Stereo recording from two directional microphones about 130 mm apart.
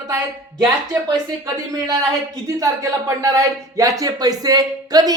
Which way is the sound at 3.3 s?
25° right (ahead or behind).